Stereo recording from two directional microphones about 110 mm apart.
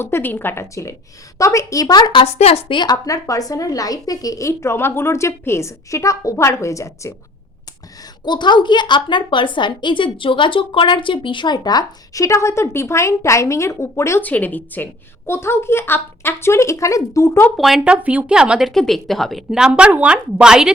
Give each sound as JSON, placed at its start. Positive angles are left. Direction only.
{"t": 0.0, "sound": "speech", "side_deg": 20}
{"t": 2.2, "sound": "a woman's voice", "side_deg": 65}
{"t": 2.7, "sound": "speech", "side_deg": 40}
{"t": 8.2, "sound": "a woman's voice", "side_deg": 45}
{"t": 14.3, "sound": "speech", "side_deg": 15}
{"t": 17.6, "sound": "speech", "side_deg": 0}
{"t": 18.7, "sound": "a woman's voice", "side_deg": 5}